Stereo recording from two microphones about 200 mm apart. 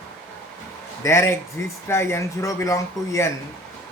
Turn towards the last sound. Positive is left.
turn(degrees=15)  # may be behind; listen again after turning